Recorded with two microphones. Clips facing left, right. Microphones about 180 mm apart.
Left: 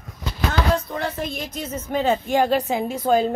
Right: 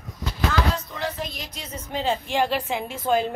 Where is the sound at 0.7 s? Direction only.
50° left (ahead or behind).